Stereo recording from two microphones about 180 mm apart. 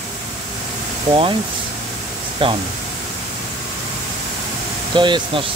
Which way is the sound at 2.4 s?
30° right (ahead or behind).